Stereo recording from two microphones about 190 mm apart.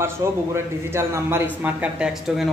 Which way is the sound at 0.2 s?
15° right (ahead or behind).